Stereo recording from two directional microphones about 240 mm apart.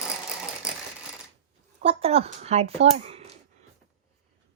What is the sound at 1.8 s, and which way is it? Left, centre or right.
Speech, right.